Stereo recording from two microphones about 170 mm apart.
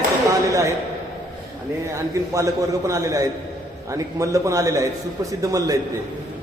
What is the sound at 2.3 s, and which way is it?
A man's voice, 20° right (ahead or behind).